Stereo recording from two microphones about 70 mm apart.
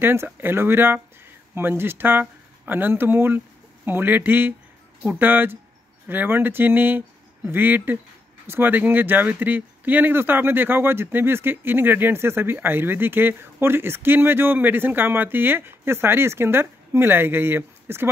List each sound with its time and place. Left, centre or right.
0.0 s speech: right